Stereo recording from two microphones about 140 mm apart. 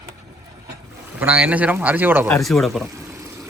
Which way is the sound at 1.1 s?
10° right (ahead or behind).